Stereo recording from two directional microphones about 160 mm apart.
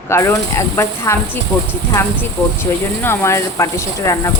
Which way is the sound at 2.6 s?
15° left (ahead or behind).